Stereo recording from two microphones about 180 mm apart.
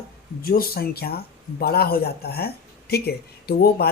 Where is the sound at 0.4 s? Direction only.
55° left (ahead or behind).